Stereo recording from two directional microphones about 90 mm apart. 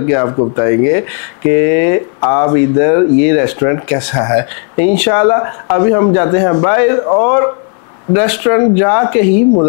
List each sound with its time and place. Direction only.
0.4 s speech: 25° left (ahead or behind)